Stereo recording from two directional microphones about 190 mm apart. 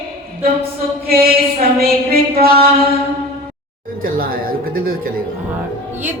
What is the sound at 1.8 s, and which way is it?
Speech, 55° right (ahead or behind).